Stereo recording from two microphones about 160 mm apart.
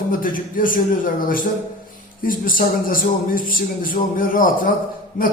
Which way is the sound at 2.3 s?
60° left (ahead or behind).